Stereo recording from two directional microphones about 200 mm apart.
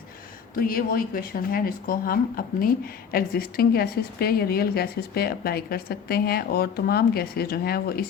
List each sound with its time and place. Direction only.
0.5 s speech: 45° left (ahead or behind)